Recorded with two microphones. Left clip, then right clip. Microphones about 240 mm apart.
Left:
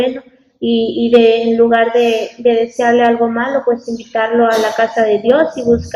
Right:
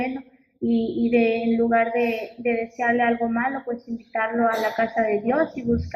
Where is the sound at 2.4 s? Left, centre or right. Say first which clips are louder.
Left 10 dB; right.